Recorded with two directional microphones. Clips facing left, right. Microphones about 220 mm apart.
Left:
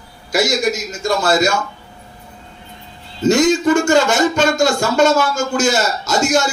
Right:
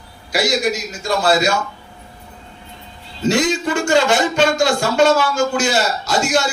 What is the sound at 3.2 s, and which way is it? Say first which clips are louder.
Speech: left 4 dB; 45° left (ahead or behind).